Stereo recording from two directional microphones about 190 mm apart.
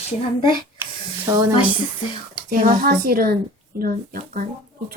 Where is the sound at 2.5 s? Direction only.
50° right (ahead or behind).